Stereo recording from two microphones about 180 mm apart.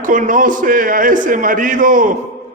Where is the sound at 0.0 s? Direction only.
45° right (ahead or behind).